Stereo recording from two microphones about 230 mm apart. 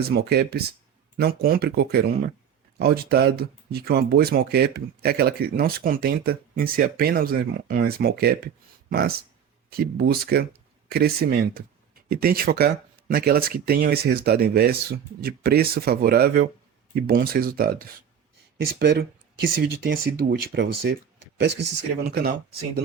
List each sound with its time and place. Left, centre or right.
0.0 s speech: right
22.1 s speech: right